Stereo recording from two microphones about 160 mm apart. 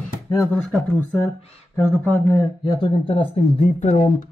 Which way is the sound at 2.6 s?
30° left (ahead or behind).